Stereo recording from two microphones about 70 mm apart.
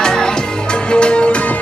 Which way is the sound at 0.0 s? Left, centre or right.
Centre.